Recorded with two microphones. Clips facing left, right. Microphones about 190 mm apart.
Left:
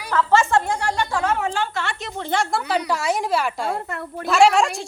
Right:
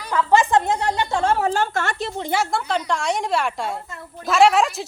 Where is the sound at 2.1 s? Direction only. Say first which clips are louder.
Left 2 dB; 15° right (ahead or behind).